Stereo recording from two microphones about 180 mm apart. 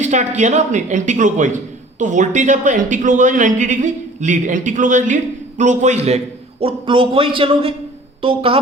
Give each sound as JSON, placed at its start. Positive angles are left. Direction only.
{"t": 0.0, "sound": "a man's voice", "side_deg": -40}